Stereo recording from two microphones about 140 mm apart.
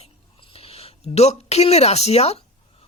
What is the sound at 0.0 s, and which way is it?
A man's voice, 45° left (ahead or behind).